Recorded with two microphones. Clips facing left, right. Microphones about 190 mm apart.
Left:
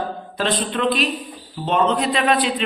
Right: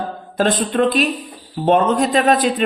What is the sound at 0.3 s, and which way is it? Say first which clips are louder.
A woman's voice: right 6 dB; 45° right (ahead or behind).